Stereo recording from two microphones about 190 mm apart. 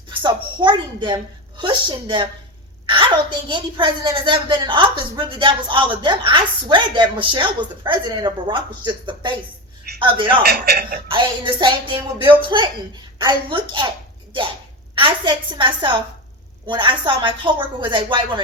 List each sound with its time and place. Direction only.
0.1 s a woman's voice: 25° right (ahead or behind)
10.4 s speech: 55° right (ahead or behind)
11.1 s a woman's voice: 25° right (ahead or behind)
14.9 s a woman's voice: 25° right (ahead or behind)